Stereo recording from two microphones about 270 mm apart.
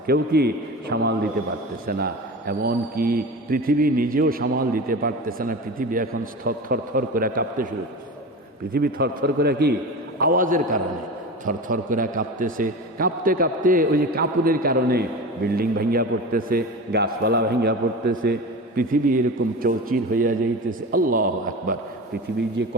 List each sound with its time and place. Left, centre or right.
0.1 s a man's voice: right
8.7 s a man's voice: right
22.6 s a man's voice: right